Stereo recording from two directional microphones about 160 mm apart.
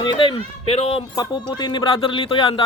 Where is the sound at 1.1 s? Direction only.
30° left (ahead or behind).